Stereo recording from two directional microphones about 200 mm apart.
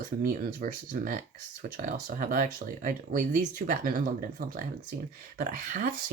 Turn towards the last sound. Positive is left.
turn(degrees=-45)  # may be behind; listen again after turning